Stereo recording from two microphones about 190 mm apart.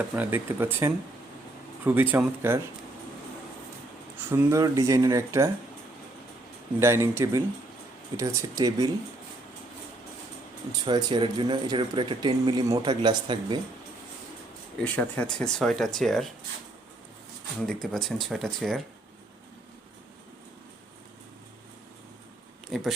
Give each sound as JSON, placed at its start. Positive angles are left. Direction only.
{"t": 0.2, "sound": "speech", "side_deg": -10}
{"t": 4.3, "sound": "speech", "side_deg": -15}
{"t": 6.7, "sound": "speech", "side_deg": -15}
{"t": 10.7, "sound": "speech", "side_deg": -25}
{"t": 14.9, "sound": "speech", "side_deg": 5}
{"t": 17.6, "sound": "speech", "side_deg": 0}
{"t": 22.7, "sound": "speech", "side_deg": 0}